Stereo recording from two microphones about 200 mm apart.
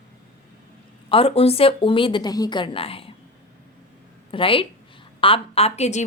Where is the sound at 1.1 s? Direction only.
30° left (ahead or behind).